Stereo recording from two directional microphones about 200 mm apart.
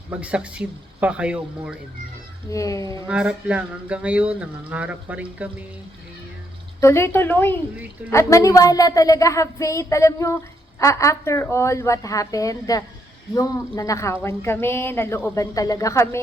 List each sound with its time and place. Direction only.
0.1 s speech: 5° right (ahead or behind)
2.5 s speech: 15° left (ahead or behind)
3.1 s speech: 5° right (ahead or behind)
6.7 s speech: 15° left (ahead or behind)